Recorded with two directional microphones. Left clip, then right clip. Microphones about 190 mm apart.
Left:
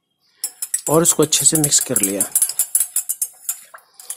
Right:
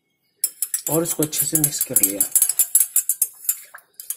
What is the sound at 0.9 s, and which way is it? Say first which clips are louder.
Speech: left 7 dB; 35° left (ahead or behind).